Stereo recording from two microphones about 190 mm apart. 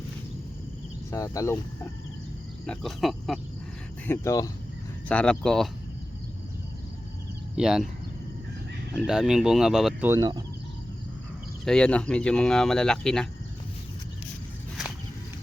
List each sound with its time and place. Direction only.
1.1 s speech: 15° left (ahead or behind)
2.6 s speech: centre (ahead or behind)
4.0 s speech: 15° left (ahead or behind)
5.0 s speech: 5° left (ahead or behind)
7.5 s speech: 5° right (ahead or behind)
9.0 s speech: 5° right (ahead or behind)
10.1 s speech: 20° right (ahead or behind)
11.6 s speech: 5° left (ahead or behind)